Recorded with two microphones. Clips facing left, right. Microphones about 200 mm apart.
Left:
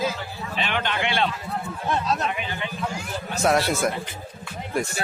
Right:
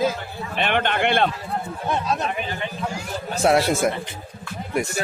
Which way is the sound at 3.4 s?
25° right (ahead or behind).